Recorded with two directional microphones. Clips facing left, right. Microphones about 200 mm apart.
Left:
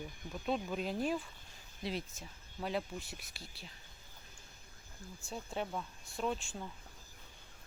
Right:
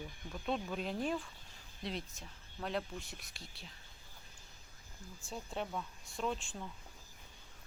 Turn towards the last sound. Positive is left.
turn(degrees=0)  # may be behind; listen again after turning